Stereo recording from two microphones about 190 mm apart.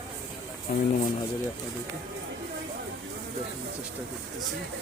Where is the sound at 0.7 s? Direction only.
45° left (ahead or behind).